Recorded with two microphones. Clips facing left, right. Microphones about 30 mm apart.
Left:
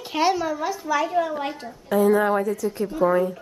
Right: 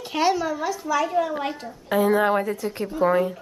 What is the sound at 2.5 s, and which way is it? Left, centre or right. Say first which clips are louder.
Speech: left 2 dB; right.